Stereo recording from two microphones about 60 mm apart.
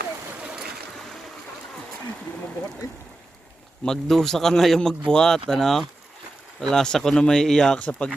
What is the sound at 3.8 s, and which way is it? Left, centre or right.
Speech, centre.